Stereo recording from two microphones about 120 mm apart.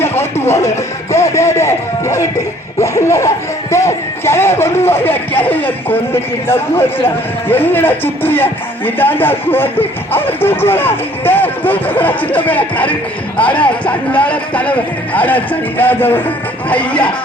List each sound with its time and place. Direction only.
0.0 s speech: 20° left (ahead or behind)
7.4 s speech: 15° left (ahead or behind)